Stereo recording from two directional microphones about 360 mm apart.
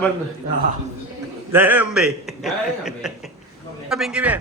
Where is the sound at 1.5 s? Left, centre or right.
Centre.